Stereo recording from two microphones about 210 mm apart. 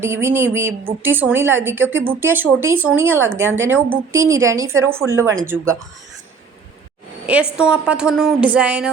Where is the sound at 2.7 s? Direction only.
80° right.